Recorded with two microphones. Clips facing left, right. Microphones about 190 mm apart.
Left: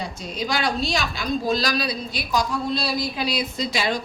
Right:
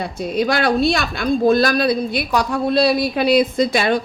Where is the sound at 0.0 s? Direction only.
60° right (ahead or behind).